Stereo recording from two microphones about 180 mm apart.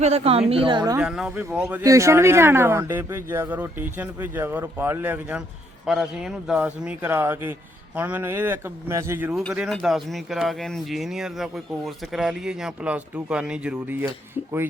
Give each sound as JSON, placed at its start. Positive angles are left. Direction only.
{"t": 0.0, "sound": "a woman's voice", "side_deg": -35}
{"t": 0.9, "sound": "speech", "side_deg": -5}
{"t": 1.4, "sound": "speech", "side_deg": -15}